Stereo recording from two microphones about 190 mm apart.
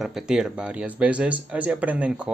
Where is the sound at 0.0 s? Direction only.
5° right (ahead or behind).